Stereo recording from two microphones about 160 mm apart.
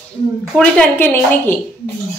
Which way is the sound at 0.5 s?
10° left (ahead or behind).